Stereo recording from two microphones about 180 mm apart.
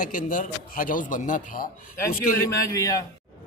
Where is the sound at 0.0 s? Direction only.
45° left (ahead or behind).